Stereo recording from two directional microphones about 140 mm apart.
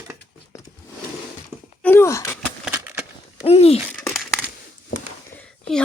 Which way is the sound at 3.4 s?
45° left (ahead or behind).